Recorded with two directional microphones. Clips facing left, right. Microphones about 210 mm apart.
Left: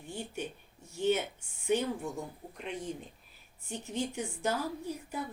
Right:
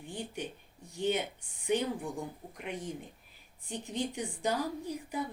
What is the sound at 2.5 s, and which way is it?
Speech, 15° right (ahead or behind).